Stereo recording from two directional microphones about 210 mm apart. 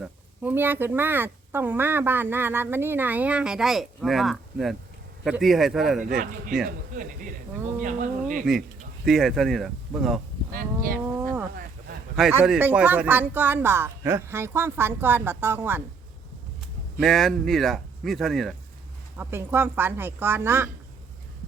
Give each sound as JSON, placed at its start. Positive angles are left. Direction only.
{"t": 0.0, "sound": "speech", "side_deg": -10}
{"t": 7.8, "sound": "speech", "side_deg": -35}
{"t": 9.0, "sound": "speech", "side_deg": 0}
{"t": 11.0, "sound": "livestock", "side_deg": -10}
{"t": 12.1, "sound": "speech", "side_deg": -5}
{"t": 17.0, "sound": "speech", "side_deg": 0}
{"t": 19.1, "sound": "speech", "side_deg": -10}